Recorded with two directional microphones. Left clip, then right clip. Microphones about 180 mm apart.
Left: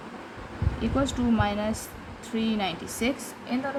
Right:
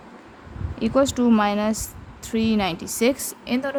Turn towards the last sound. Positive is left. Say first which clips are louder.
# right 5 dB
turn(degrees=-70)  # may be behind; listen again after turning